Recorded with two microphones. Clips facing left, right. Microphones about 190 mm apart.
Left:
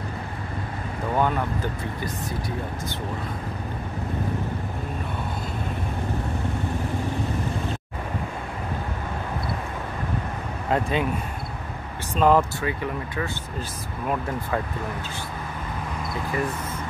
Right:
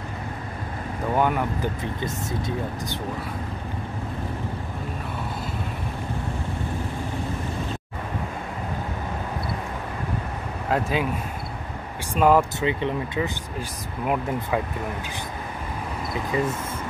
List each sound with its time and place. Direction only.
1.1 s speech: 10° right (ahead or behind)
10.7 s speech: 5° right (ahead or behind)
12.1 s speech: 10° right (ahead or behind)
12.5 s speech: 20° right (ahead or behind)